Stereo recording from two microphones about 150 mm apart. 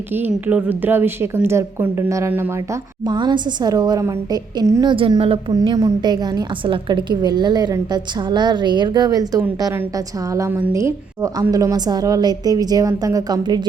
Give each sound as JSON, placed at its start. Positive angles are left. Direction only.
{"t": 0.1, "sound": "a woman's voice", "side_deg": -15}
{"t": 3.1, "sound": "a woman's voice", "side_deg": -30}